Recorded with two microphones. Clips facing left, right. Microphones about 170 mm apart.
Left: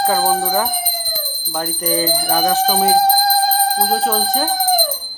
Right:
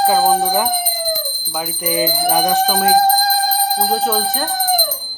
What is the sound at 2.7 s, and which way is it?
Speech, centre (ahead or behind).